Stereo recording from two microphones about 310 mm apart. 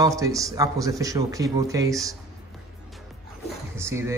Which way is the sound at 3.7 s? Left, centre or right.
Centre.